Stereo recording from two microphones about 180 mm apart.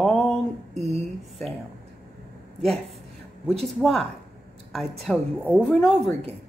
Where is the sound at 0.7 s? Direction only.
35° right (ahead or behind).